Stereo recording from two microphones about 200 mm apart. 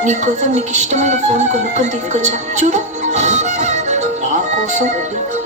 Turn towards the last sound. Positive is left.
turn(degrees=-40)  # may be behind; listen again after turning